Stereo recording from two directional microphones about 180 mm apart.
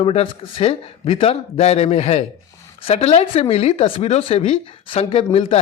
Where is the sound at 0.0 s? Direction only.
30° left (ahead or behind).